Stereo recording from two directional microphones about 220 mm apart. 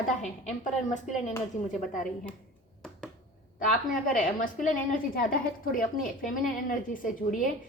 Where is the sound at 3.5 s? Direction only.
40° left (ahead or behind).